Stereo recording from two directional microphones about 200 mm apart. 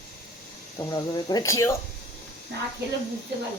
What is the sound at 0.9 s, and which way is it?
Speech, 20° left (ahead or behind).